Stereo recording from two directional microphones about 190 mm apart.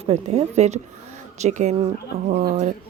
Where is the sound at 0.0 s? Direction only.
30° right (ahead or behind).